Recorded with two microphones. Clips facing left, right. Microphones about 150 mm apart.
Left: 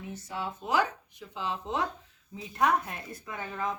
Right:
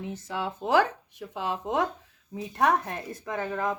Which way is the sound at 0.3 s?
90° right.